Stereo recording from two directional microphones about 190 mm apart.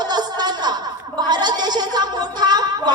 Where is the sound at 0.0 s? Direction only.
20° right (ahead or behind).